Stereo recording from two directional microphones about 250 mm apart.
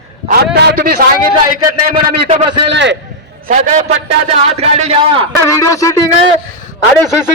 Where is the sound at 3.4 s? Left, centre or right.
Right.